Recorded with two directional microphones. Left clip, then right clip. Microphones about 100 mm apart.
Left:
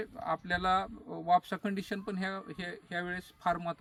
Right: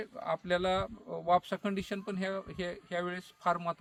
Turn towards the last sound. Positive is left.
turn(degrees=-30)  # may be behind; listen again after turning